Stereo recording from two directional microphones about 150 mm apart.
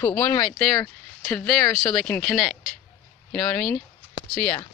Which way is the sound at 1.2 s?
5° left (ahead or behind).